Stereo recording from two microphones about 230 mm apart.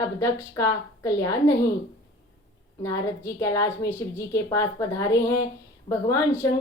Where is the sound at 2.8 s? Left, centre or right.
Centre.